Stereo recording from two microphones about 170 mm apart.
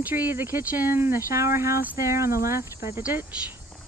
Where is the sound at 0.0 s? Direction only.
10° right (ahead or behind).